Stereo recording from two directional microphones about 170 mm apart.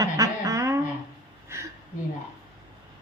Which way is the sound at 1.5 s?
15° right (ahead or behind).